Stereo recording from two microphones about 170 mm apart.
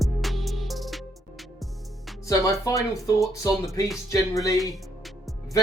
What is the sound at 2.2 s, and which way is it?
Speech, 20° left (ahead or behind).